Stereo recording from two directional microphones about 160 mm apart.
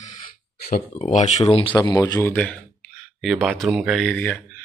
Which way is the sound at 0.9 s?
60° left (ahead or behind).